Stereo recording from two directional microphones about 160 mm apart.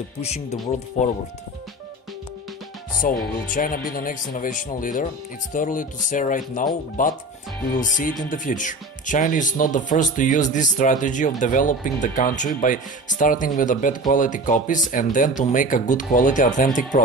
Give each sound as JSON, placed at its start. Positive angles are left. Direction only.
{"t": 0.2, "sound": "speech", "side_deg": 40}
{"t": 3.0, "sound": "speech", "side_deg": 60}